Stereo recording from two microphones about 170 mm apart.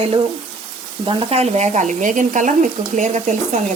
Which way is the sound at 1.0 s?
30° right (ahead or behind).